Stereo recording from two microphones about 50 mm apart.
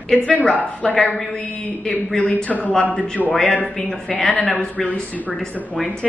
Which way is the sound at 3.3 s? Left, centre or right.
Centre.